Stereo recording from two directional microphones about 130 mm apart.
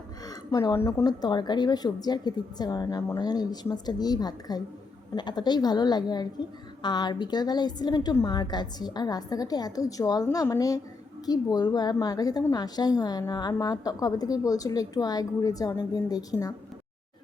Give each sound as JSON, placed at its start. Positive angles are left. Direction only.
{"t": 0.3, "sound": "a woman's voice", "side_deg": 25}